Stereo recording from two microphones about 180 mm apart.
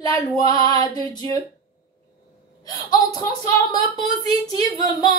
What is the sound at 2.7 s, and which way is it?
A woman's voice, 25° left (ahead or behind).